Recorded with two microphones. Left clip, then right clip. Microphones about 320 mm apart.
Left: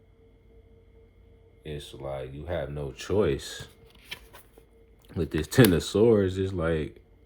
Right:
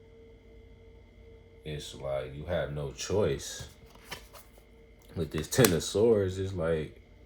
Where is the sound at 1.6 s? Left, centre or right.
Left.